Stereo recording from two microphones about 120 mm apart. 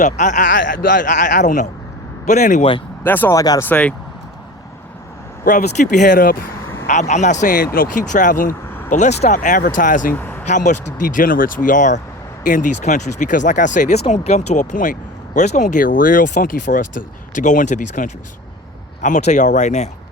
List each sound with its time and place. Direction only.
0.0 s speech: 90° left
3.0 s speech: 15° left (ahead or behind)
3.3 s speech: 30° left (ahead or behind)
3.6 s speech: 10° left (ahead or behind)
5.5 s speech: 85° left
7.1 s speech: 80° left
10.1 s vehicle: 15° left (ahead or behind)
10.4 s speech: 85° left
14.1 s speech: 70° left (ahead or behind)